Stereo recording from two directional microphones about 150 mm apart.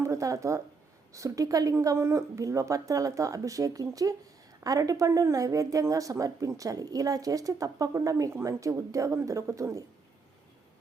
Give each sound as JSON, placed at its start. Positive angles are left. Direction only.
{"t": 0.0, "sound": "speech", "side_deg": -20}